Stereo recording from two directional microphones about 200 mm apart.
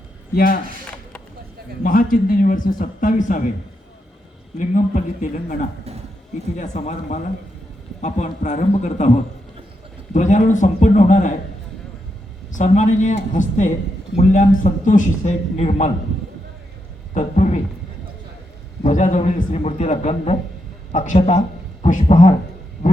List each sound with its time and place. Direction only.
0.3 s speech: 45° left (ahead or behind)
1.8 s speech: 45° left (ahead or behind)
4.5 s a man's voice: 35° left (ahead or behind)
12.5 s a man's voice: 35° left (ahead or behind)
17.2 s a man's voice: 35° left (ahead or behind)
18.8 s a man's voice: 40° left (ahead or behind)